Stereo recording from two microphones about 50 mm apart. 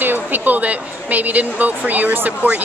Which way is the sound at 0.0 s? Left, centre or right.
Right.